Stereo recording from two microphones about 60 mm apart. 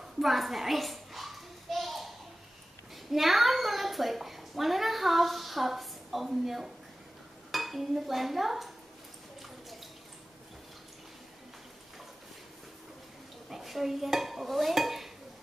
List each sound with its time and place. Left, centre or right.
0.0 s a sound: centre
3.1 s a woman's voice: centre
13.5 s stir: centre